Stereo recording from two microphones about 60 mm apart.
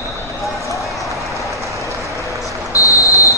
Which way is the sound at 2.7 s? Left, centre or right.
Left.